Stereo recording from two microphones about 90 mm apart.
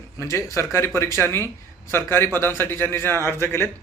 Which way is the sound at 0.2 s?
35° left (ahead or behind).